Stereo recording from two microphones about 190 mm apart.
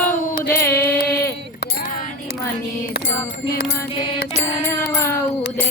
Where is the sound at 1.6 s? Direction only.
45° left (ahead or behind).